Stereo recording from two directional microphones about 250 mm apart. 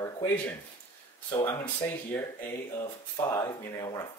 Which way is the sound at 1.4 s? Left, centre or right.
Centre.